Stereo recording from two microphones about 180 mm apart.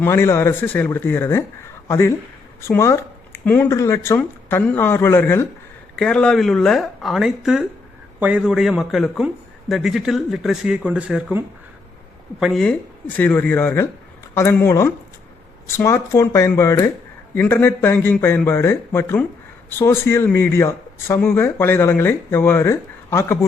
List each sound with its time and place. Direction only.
0.0 s a man's voice: 15° left (ahead or behind)